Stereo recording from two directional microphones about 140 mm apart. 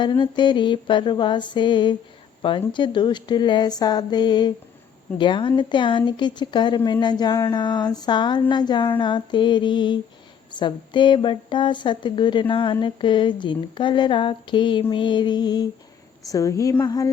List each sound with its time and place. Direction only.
0.0 s a woman's voice: 35° left (ahead or behind)